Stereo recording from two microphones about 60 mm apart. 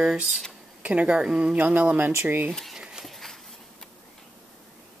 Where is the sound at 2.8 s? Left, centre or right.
Centre.